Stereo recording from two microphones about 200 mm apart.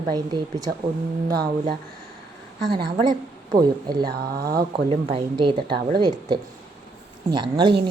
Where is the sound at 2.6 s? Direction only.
25° right (ahead or behind).